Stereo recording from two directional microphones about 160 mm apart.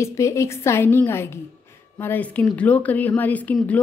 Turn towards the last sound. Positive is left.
turn(degrees=10)  # may be behind; listen again after turning